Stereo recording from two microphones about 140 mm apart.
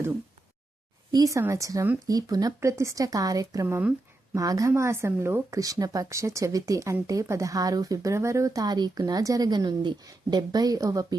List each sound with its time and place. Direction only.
1.1 s speech: 25° right (ahead or behind)